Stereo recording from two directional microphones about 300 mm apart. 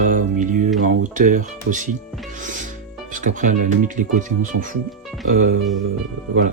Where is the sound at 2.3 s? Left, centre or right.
Right.